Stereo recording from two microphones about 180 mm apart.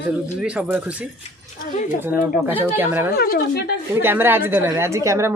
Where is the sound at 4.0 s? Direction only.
10° right (ahead or behind).